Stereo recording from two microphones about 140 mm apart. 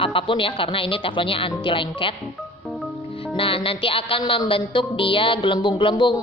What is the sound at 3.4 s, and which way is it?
A woman's voice, 40° left (ahead or behind).